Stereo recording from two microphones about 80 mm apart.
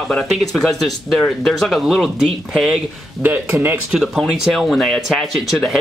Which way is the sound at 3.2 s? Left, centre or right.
Right.